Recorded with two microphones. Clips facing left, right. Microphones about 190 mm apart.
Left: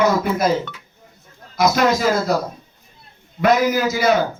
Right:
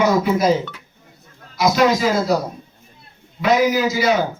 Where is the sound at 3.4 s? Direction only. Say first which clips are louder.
Even; 50° left (ahead or behind).